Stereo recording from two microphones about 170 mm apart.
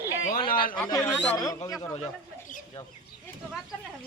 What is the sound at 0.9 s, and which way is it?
Speech, 20° left (ahead or behind).